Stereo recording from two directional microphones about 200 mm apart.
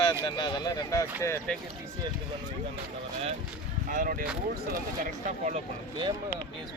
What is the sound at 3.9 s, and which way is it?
Speech, 45° right (ahead or behind).